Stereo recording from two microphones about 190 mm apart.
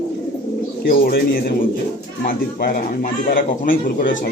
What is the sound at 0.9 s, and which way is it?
Speech, 50° left (ahead or behind).